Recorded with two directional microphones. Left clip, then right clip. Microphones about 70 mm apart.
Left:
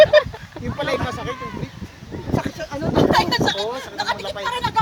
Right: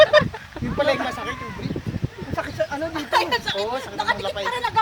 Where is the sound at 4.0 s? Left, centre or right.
Left.